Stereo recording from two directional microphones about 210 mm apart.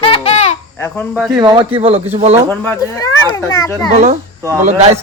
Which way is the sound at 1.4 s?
20° right (ahead or behind).